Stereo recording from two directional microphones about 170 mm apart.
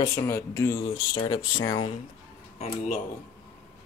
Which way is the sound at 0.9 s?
30° left (ahead or behind).